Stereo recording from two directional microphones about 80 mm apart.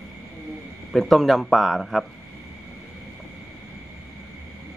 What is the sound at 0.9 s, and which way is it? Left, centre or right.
Speech, centre.